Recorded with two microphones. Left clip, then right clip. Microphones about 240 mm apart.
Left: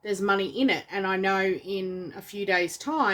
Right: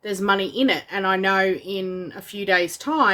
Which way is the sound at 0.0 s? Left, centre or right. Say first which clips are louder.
Right 4 dB; centre.